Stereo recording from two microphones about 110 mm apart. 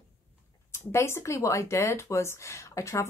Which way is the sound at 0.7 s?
25° left (ahead or behind).